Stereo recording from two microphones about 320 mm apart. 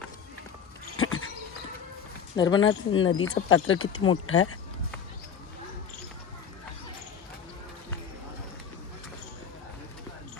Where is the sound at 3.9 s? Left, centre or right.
Left.